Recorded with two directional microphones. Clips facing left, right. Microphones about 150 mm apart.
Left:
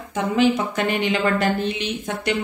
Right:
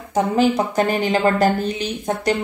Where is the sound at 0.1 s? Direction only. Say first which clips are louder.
Right 2 dB; 40° right (ahead or behind).